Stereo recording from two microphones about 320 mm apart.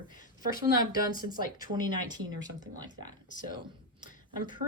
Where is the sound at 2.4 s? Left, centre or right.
Centre.